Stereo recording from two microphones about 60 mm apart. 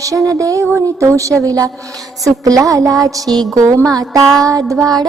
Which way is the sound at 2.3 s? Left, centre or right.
Right.